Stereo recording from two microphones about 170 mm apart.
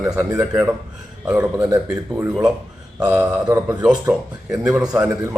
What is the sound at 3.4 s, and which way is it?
Speech, 20° right (ahead or behind).